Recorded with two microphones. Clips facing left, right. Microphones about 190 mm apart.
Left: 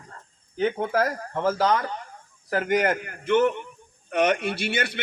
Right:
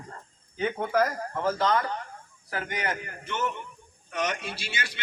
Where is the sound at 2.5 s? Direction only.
50° left (ahead or behind).